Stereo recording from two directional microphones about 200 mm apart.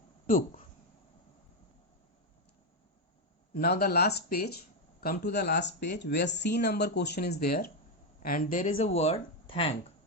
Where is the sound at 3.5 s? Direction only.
50° left (ahead or behind); by 9.7 s 25° left (ahead or behind).